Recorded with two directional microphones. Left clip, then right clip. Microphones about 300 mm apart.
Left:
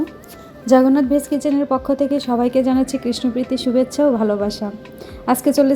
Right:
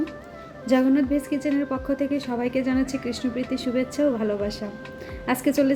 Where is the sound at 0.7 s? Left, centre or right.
Centre.